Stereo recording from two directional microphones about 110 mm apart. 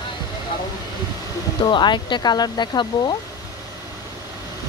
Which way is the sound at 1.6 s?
45° left (ahead or behind).